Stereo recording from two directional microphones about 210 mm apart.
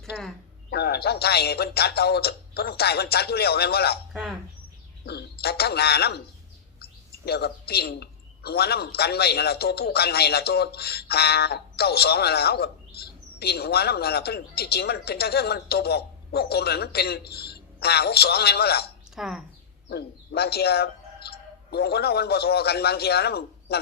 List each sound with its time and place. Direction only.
0.1 s a woman's voice: centre (ahead or behind)
0.7 s a man's voice: 50° left (ahead or behind)
4.1 s speech: 5° right (ahead or behind)
5.0 s a man's voice: 50° left (ahead or behind)
7.3 s a man's voice: 50° left (ahead or behind)
19.1 s speech: centre (ahead or behind)
19.9 s speech: 50° left (ahead or behind)